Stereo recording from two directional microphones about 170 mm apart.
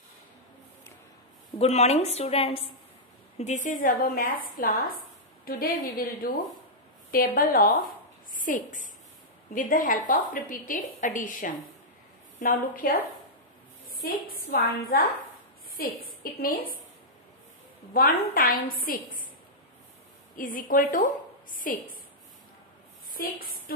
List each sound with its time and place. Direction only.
1.6 s a woman's voice: 40° left (ahead or behind); by 13.0 s 55° left (ahead or behind)
14.2 s a woman's voice: 60° left (ahead or behind)
17.9 s a woman's voice: 60° left (ahead or behind)
20.3 s a woman's voice: 55° left (ahead or behind)
23.1 s a woman's voice: 60° left (ahead or behind)